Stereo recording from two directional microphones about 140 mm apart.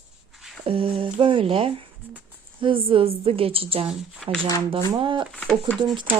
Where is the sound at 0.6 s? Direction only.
40° right (ahead or behind).